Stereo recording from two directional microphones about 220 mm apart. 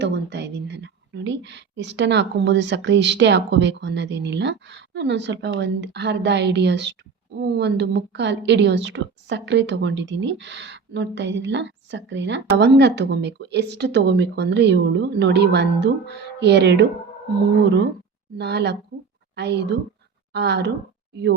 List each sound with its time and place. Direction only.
0.0 s a woman's voice: 50° right (ahead or behind)
18.3 s a woman's voice: 50° right (ahead or behind)